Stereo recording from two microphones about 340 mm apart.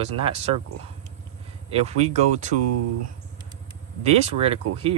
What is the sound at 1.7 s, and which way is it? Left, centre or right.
Speech, centre.